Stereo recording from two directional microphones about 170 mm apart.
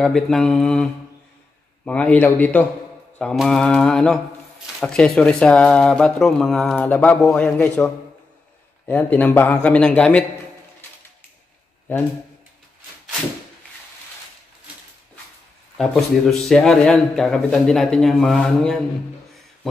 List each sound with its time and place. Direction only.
0.0 s speech: 5° left (ahead or behind)
1.9 s a man's voice: 5° left (ahead or behind)
15.8 s speech: centre (ahead or behind)